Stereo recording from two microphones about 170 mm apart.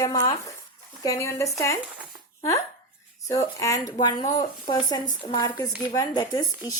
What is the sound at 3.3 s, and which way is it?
A woman's voice, 20° left (ahead or behind).